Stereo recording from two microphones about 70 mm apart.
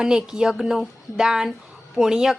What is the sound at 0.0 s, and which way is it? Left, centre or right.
A woman's voice, centre.